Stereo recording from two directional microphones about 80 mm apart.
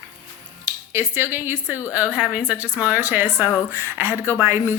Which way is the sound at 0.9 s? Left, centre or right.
Right.